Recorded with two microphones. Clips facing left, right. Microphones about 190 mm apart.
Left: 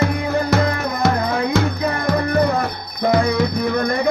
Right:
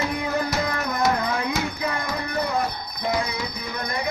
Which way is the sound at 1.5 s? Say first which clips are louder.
Left 7 dB; 40° left (ahead or behind).